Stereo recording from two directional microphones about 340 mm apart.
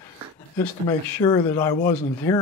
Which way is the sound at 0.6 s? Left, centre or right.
Centre.